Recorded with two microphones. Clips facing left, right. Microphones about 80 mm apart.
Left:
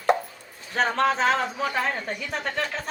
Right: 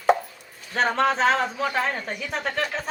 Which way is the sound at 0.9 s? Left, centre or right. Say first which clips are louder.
Right 1 dB; centre.